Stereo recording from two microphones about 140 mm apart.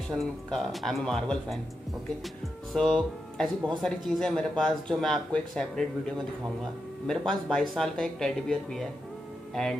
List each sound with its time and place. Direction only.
0.1 s speech: centre (ahead or behind)
2.7 s speech: 5° left (ahead or behind)